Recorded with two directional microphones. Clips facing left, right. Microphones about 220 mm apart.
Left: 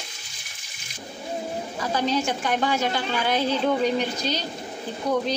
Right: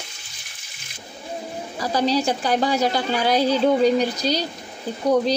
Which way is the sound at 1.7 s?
35° right (ahead or behind).